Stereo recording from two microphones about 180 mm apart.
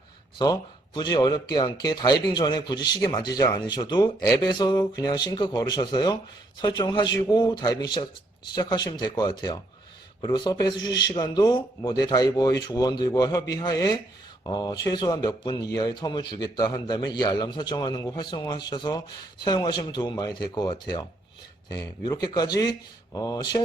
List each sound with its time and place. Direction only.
0.3 s speech: 20° left (ahead or behind)